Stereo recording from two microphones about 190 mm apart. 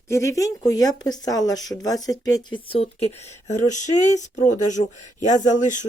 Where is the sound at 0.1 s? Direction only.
15° left (ahead or behind).